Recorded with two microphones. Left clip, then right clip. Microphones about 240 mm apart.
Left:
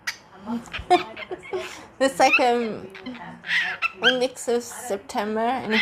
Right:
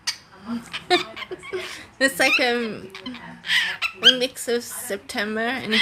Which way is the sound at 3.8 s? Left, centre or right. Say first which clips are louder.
Right 6 dB; right.